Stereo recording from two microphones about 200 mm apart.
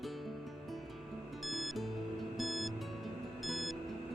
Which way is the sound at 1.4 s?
Centre (ahead or behind).